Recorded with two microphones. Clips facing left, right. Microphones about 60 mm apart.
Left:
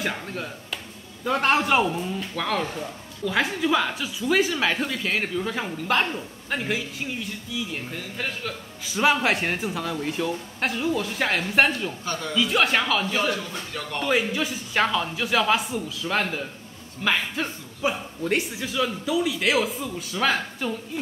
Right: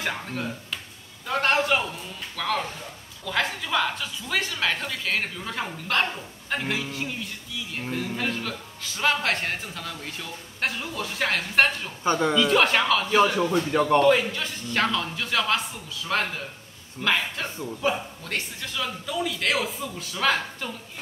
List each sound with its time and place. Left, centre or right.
0.0 s a man's voice: centre
2.1 s a man's voice: centre
12.0 s speech: right
12.4 s a man's voice: centre